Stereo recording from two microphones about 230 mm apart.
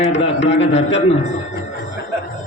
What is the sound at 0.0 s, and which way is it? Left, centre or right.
Speech, left.